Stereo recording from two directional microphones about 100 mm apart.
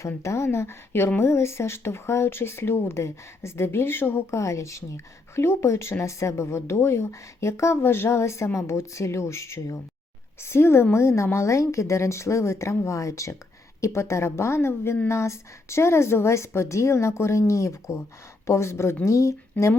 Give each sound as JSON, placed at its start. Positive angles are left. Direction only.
{"t": 0.2, "sound": "a woman's voice", "side_deg": 30}